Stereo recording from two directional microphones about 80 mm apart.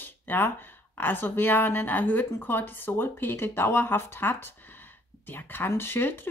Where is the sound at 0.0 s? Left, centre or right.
Left.